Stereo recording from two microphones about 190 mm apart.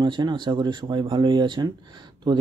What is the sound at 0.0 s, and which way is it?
Speech, 25° right (ahead or behind).